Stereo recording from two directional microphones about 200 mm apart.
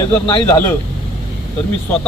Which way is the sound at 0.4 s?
10° left (ahead or behind).